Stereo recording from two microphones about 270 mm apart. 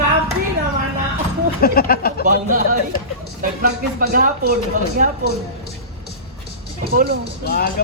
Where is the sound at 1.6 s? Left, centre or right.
Left.